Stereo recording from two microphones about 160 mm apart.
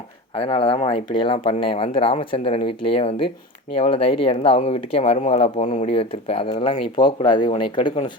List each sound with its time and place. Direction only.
0.3 s speech: 35° left (ahead or behind)